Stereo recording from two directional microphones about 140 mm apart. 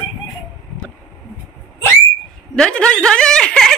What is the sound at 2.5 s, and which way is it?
A woman's voice, 5° left (ahead or behind).